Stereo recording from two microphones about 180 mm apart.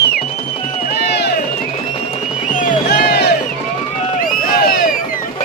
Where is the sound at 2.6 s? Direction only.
50° left (ahead or behind).